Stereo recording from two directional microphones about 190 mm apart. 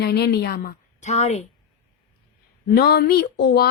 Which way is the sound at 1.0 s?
35° left (ahead or behind).